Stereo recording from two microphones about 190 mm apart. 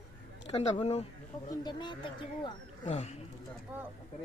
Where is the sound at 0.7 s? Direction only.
30° left (ahead or behind).